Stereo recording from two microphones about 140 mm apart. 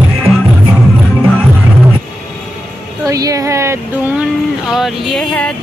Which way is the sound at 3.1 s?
25° right (ahead or behind).